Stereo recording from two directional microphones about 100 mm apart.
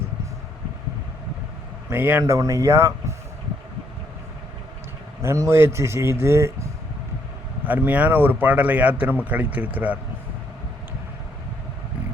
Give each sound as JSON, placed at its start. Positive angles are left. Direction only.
{"t": 1.9, "sound": "speech", "side_deg": -20}
{"t": 5.2, "sound": "speech", "side_deg": -30}
{"t": 7.6, "sound": "speech", "side_deg": -20}